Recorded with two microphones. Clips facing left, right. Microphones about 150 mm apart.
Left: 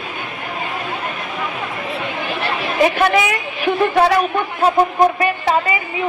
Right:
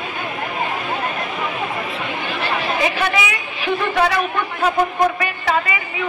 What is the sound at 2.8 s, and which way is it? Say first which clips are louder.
A woman's voice: left 9 dB; 45° left (ahead or behind).